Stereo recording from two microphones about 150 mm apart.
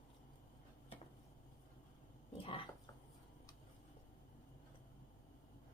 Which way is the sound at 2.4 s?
35° left (ahead or behind).